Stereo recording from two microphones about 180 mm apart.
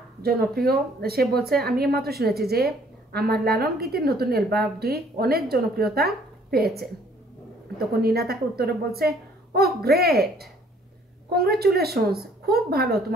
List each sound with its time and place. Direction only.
0.2 s a woman's voice: 60° right (ahead or behind)
8.0 s a woman's voice: 60° right (ahead or behind)